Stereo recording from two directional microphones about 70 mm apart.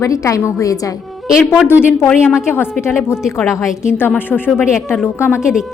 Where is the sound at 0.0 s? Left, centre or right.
Left.